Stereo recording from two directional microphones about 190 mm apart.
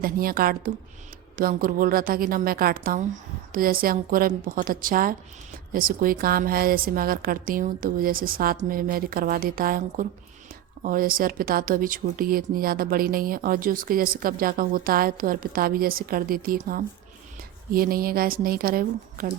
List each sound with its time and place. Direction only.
0.0 s speech: 50° right (ahead or behind)